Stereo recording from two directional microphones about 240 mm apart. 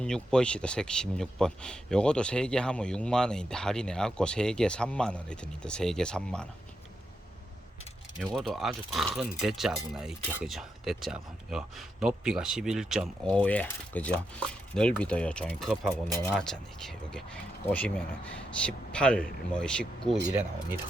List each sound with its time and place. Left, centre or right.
0.0 s speech: centre
8.2 s speech: centre